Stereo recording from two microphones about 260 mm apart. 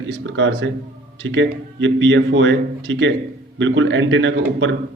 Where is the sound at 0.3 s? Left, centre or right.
Right.